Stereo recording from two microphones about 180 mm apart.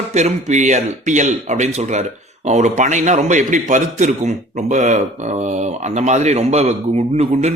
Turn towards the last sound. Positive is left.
turn(degrees=-35)  # may be behind; listen again after turning